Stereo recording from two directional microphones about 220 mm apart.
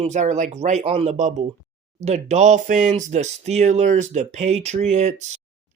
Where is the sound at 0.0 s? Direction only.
30° right (ahead or behind).